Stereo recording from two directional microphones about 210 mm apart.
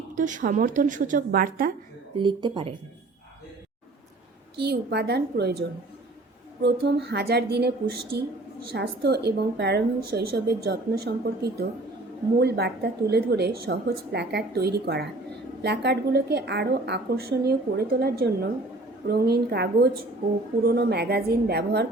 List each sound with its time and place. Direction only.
0.2 s a woman's voice: 40° right (ahead or behind)
2.1 s speech: 25° right (ahead or behind)
4.6 s a woman's voice: 50° right (ahead or behind)
8.7 s a woman's voice: 50° right (ahead or behind)